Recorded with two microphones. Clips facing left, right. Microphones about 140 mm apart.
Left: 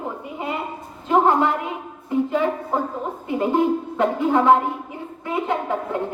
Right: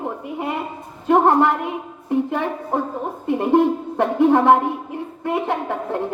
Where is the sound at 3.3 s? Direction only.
65° right (ahead or behind).